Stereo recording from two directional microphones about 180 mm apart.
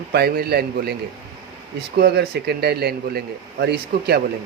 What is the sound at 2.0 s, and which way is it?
Speech, 65° right (ahead or behind).